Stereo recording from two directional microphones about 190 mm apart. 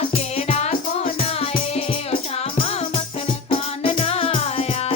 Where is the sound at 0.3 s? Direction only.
30° left (ahead or behind).